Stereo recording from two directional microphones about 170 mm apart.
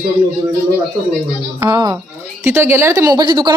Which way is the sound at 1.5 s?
20° right (ahead or behind).